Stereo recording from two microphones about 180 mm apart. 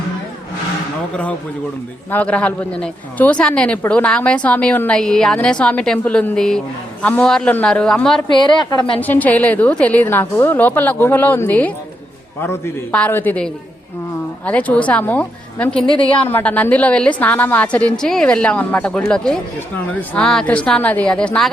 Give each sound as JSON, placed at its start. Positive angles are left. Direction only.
{"t": 1.1, "sound": "a woman's voice", "side_deg": 5}
{"t": 8.3, "sound": "a woman's voice", "side_deg": 25}
{"t": 9.0, "sound": "a woman's voice", "side_deg": 10}